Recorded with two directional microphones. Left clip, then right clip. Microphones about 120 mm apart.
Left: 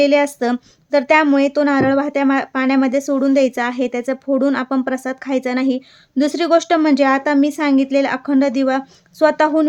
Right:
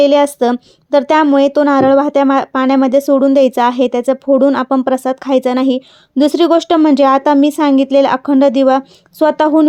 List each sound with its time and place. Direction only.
0.0 s a woman's voice: 40° right (ahead or behind)